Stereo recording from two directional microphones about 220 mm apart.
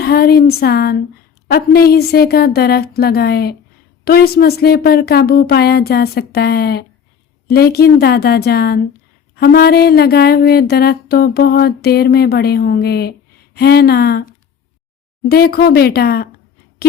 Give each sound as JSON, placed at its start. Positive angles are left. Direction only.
{"t": 0.0, "sound": "speech", "side_deg": 45}
{"t": 15.3, "sound": "speech", "side_deg": 45}